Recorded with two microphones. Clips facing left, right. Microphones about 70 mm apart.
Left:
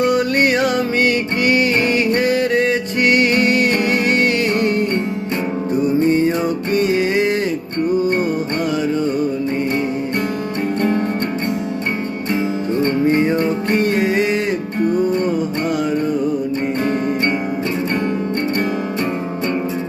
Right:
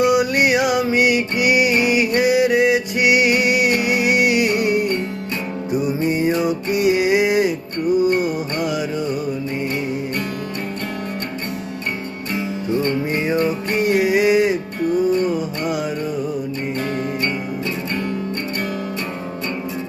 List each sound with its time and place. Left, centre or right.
0.0 s music: centre
12.3 s music: left
13.7 s music: centre